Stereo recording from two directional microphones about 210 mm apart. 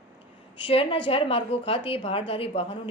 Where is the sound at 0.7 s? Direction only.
25° left (ahead or behind).